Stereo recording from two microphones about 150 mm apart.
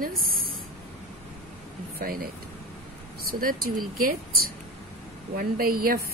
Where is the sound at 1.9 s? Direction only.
80° right.